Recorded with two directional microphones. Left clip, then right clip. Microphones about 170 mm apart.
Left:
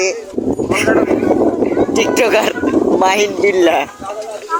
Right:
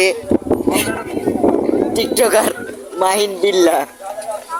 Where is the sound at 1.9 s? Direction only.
5° right (ahead or behind).